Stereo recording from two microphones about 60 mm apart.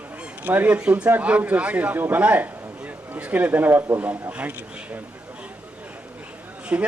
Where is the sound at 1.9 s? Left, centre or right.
Right.